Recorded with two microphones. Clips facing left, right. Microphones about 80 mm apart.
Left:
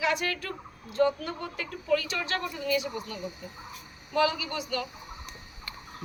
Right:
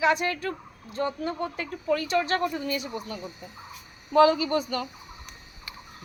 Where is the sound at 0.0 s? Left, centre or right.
Right.